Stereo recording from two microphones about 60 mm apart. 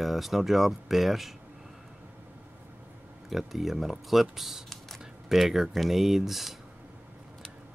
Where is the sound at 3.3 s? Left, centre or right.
Centre.